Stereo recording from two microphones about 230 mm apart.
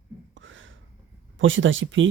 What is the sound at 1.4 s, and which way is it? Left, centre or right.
Speech, right.